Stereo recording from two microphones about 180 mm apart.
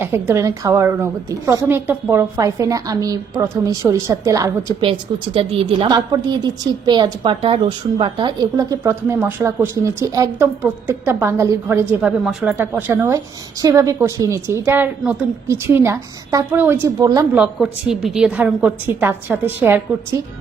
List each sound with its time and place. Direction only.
0.0 s a woman's voice: 15° right (ahead or behind)
12.2 s a woman's voice: centre (ahead or behind); by 17.2 s 20° right (ahead or behind)
17.3 s a woman's voice: 5° right (ahead or behind)